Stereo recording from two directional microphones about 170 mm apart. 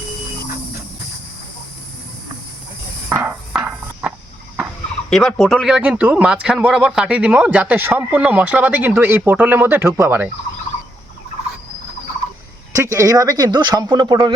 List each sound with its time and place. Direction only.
3.1 s a sound: 10° right (ahead or behind)
5.0 s speech: 5° left (ahead or behind); by 10.2 s 10° right (ahead or behind)
12.7 s speech: 15° right (ahead or behind)